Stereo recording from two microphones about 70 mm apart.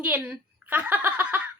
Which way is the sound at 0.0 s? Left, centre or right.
Centre.